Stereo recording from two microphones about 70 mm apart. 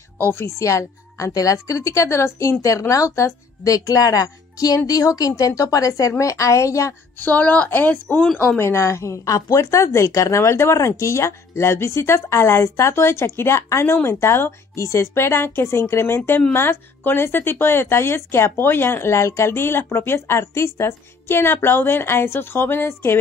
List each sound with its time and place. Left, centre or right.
0.6 s speech: left
7.2 s speech: left
8.5 s speech: left